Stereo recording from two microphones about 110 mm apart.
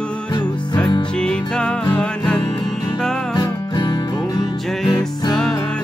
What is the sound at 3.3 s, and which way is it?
Music, 40° left (ahead or behind).